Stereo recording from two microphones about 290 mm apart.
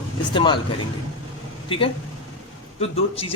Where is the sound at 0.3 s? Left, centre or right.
Centre.